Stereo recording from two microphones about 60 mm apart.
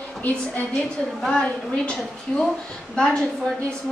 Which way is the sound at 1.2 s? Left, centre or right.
Centre.